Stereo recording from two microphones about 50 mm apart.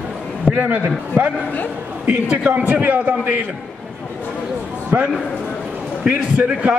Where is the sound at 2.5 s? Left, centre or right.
Right.